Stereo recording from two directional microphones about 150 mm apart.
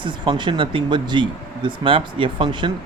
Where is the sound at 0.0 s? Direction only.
30° right (ahead or behind).